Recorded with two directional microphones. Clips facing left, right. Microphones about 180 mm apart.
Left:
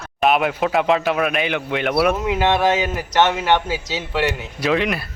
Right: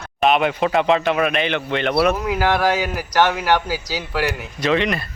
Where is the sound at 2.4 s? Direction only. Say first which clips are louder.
Left 1 dB; 25° left (ahead or behind).